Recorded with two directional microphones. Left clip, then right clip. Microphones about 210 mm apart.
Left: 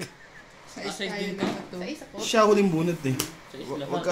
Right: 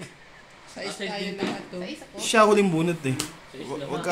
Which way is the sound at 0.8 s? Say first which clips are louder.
Right 1 dB; 40° right (ahead or behind).